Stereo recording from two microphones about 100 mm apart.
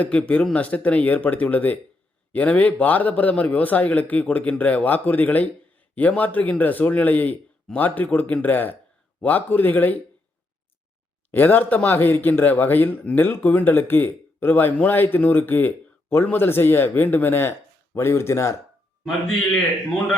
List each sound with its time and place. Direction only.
0.0 s a man's voice: 15° left (ahead or behind)
11.3 s a man's voice: 20° left (ahead or behind)